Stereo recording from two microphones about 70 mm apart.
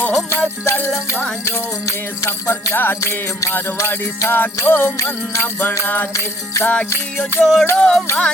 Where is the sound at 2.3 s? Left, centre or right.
Left.